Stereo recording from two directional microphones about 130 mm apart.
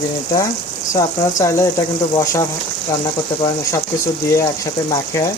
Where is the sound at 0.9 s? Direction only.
25° left (ahead or behind).